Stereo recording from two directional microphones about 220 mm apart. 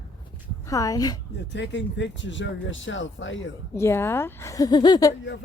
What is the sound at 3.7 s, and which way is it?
Speech, 10° left (ahead or behind).